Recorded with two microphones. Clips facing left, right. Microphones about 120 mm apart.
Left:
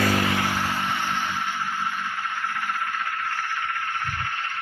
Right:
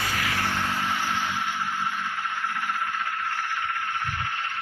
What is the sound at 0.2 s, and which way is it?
Vehicle, 20° left (ahead or behind).